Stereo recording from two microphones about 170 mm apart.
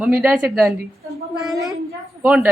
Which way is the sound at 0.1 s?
10° right (ahead or behind).